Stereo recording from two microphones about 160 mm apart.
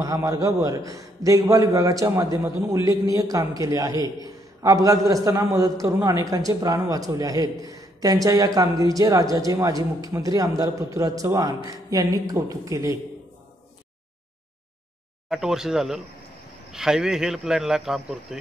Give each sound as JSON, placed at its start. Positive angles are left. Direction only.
{"t": 0.0, "sound": "a man's voice", "side_deg": -20}
{"t": 15.2, "sound": "a man's voice", "side_deg": -5}